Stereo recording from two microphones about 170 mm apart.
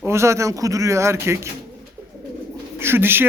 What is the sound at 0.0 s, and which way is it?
Speech, 15° right (ahead or behind).